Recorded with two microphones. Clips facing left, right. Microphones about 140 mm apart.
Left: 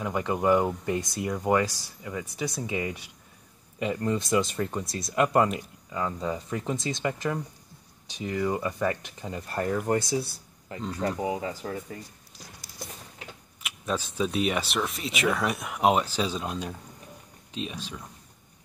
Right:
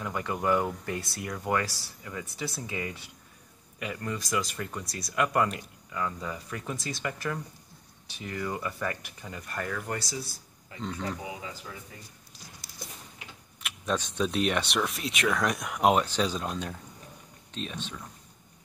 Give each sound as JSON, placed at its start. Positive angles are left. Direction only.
{"t": 0.0, "sound": "speech", "side_deg": 20}
{"t": 9.9, "sound": "speech", "side_deg": 55}
{"t": 11.0, "sound": "speech", "side_deg": 40}
{"t": 13.6, "sound": "speech", "side_deg": 5}